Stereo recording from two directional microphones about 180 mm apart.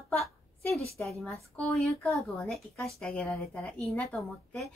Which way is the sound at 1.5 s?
5° left (ahead or behind).